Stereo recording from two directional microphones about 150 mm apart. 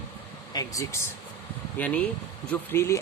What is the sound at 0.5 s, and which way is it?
Speech, 20° left (ahead or behind).